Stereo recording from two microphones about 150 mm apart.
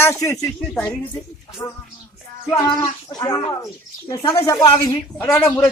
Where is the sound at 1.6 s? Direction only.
30° left (ahead or behind).